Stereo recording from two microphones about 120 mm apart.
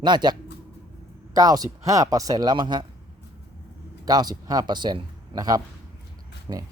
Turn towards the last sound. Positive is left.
turn(degrees=-40)  # may be behind; listen again after turning